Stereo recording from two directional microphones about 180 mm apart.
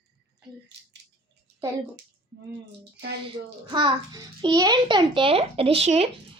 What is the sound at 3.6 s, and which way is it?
A child's voice, 25° right (ahead or behind).